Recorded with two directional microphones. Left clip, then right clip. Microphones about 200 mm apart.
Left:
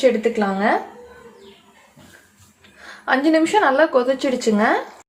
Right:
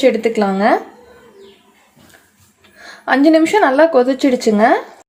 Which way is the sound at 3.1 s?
30° right (ahead or behind).